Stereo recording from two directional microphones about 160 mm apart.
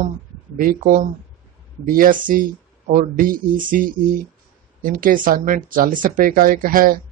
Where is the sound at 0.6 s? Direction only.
60° right (ahead or behind).